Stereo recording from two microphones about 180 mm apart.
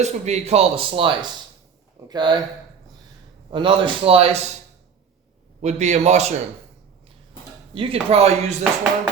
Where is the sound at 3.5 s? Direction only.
30° right (ahead or behind).